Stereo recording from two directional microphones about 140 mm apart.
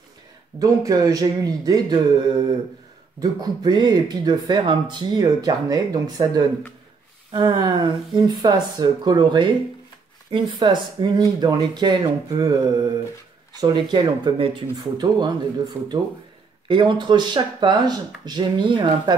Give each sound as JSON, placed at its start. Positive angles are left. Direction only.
{"t": 0.6, "sound": "speech", "side_deg": -25}
{"t": 15.8, "sound": "speech", "side_deg": -15}
{"t": 16.6, "sound": "speech", "side_deg": -35}